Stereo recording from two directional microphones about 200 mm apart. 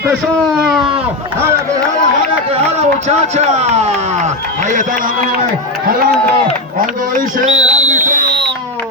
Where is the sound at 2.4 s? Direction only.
30° right (ahead or behind).